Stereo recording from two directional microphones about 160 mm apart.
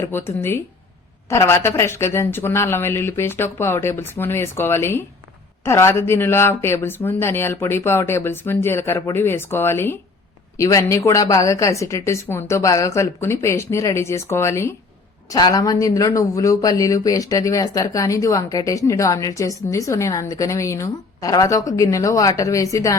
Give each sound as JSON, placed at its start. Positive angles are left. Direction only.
{"t": 0.0, "sound": "speech", "side_deg": 15}